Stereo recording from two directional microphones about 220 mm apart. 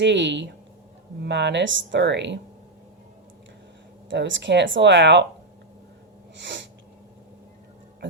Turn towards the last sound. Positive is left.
turn(degrees=-55)  # may be behind; listen again after turning